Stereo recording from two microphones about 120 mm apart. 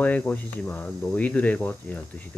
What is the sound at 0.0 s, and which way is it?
Speech, 10° left (ahead or behind).